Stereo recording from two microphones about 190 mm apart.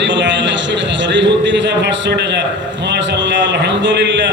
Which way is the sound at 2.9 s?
65° right (ahead or behind).